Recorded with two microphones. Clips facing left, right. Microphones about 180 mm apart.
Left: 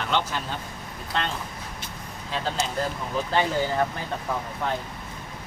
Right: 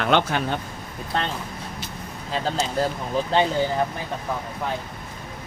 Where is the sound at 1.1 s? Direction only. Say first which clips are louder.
Right 2 dB; 40° right (ahead or behind).